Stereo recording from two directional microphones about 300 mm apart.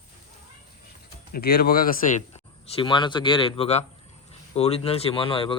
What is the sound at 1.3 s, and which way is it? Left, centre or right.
Speech, left.